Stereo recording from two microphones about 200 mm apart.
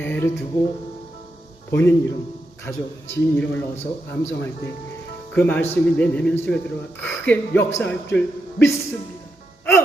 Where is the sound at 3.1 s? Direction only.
10° left (ahead or behind).